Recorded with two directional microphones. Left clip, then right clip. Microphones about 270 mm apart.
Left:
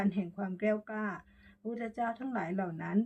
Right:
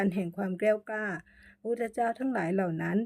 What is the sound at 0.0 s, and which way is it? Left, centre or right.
Speech, right.